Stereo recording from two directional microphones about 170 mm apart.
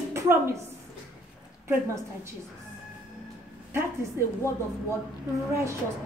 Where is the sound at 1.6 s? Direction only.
15° right (ahead or behind).